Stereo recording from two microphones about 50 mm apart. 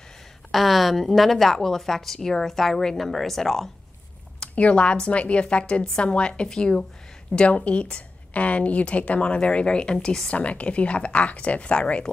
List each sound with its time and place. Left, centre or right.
0.5 s a woman's voice: centre
4.6 s a woman's voice: left